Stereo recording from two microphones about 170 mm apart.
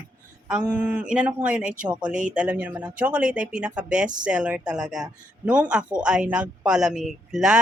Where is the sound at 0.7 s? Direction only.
10° right (ahead or behind).